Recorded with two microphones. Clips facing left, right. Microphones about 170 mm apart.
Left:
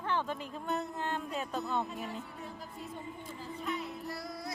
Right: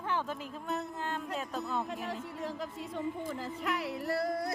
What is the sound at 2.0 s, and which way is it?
Speech, 90° right.